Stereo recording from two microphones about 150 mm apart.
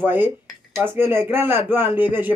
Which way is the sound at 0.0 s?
15° right (ahead or behind).